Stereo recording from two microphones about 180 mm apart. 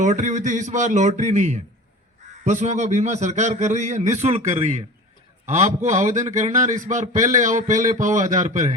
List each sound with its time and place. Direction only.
0.0 s a man's voice: 40° right (ahead or behind)